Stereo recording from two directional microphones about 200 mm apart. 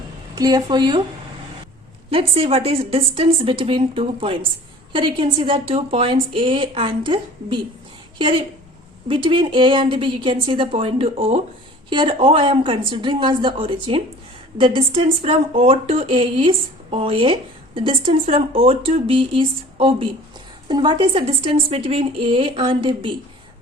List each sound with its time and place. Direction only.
0.3 s speech: 20° right (ahead or behind)
2.0 s speech: 30° right (ahead or behind)